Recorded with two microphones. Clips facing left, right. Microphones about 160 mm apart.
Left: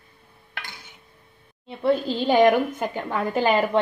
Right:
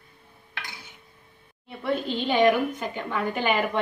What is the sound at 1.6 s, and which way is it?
A woman's voice, 35° left (ahead or behind).